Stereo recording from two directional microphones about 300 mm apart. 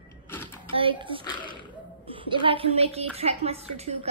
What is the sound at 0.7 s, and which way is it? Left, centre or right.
A child's voice, centre.